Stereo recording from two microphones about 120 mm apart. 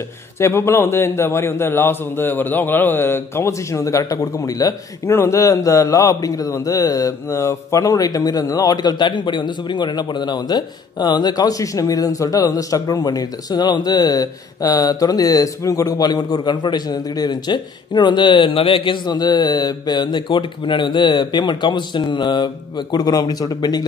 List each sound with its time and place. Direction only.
0.4 s a man's voice: 20° left (ahead or behind)